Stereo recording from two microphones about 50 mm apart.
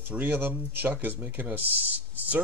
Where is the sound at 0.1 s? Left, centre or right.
Right.